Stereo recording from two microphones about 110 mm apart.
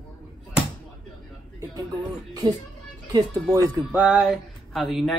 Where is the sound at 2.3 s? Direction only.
35° right (ahead or behind).